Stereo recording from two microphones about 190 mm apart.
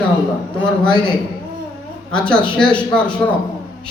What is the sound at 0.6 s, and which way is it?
Speech, 5° left (ahead or behind).